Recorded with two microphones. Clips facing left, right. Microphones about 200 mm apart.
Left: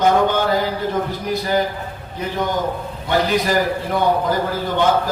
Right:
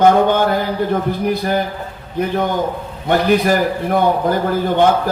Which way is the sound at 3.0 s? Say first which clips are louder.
Right 5 dB; 55° right (ahead or behind).